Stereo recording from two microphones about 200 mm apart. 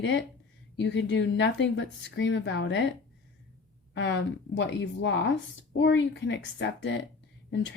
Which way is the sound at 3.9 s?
65° left (ahead or behind).